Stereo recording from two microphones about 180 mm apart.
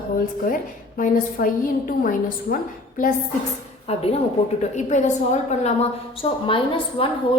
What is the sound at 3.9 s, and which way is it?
A woman's voice, 35° left (ahead or behind).